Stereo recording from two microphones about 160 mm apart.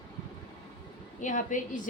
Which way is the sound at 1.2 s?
55° left (ahead or behind).